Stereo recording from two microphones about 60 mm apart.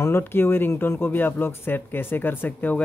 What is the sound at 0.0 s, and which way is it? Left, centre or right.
Speech, left.